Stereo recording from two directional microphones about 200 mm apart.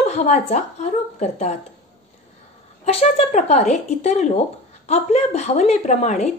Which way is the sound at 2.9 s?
30° left (ahead or behind).